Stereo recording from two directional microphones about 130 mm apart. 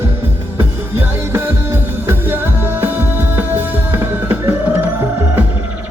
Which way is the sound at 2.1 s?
15° right (ahead or behind).